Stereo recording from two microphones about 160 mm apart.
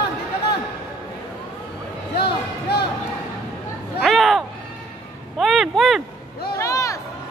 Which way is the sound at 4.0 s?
Centre (ahead or behind).